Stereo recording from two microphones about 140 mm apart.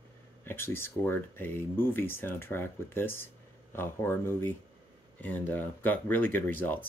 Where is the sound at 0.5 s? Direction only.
15° left (ahead or behind).